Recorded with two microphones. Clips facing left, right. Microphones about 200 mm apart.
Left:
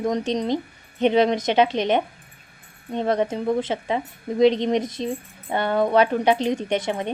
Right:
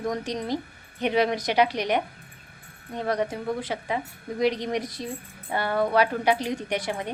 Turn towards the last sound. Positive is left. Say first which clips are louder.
# left 5 dB
turn(degrees=20)  # may be behind; listen again after turning